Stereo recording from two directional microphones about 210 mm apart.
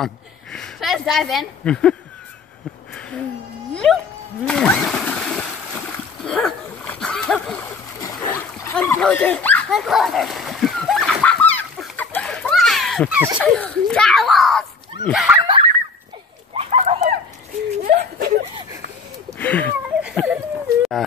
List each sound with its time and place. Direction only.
0.0 s speech: centre (ahead or behind)
3.7 s music: 5° left (ahead or behind)
4.5 s splash: 5° left (ahead or behind)
6.2 s dog: centre (ahead or behind)
8.6 s dog: 10° left (ahead or behind)
13.4 s a child's voice: 5° left (ahead or behind)
15.4 s a sound: 25° right (ahead or behind); by 18.3 s 40° right (ahead or behind)
19.3 s a sound: 10° left (ahead or behind)
20.0 s a sound: 5° right (ahead or behind)